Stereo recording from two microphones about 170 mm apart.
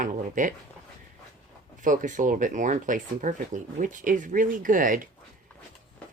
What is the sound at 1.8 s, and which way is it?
Speech, 50° right (ahead or behind).